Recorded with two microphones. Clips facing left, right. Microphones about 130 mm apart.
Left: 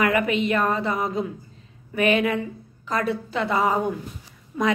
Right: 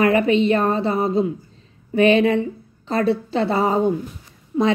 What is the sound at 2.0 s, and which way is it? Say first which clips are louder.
A woman's voice: right 6 dB; 30° right (ahead or behind).